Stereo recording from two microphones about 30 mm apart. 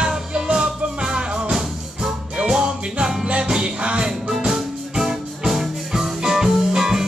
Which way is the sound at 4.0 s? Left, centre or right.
Right.